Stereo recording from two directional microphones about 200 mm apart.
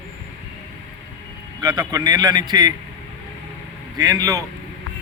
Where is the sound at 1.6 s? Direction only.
20° right (ahead or behind).